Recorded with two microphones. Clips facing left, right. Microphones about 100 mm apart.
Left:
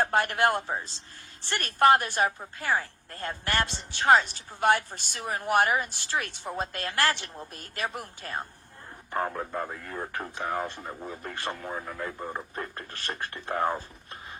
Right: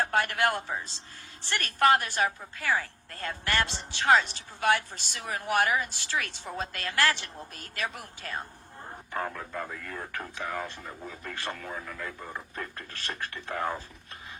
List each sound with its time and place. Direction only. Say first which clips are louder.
0.0 s speech: left 2 dB; 40° left (ahead or behind)
1.6 s a woman's voice: left 3 dB; 45° left (ahead or behind)
9.1 s speech: left 4 dB; 30° left (ahead or behind)
10.3 s speech: left 4 dB; 40° left (ahead or behind)
11.5 s speech: left 3 dB; 30° left (ahead or behind)